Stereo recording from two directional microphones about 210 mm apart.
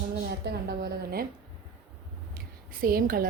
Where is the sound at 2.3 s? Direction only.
45° right (ahead or behind).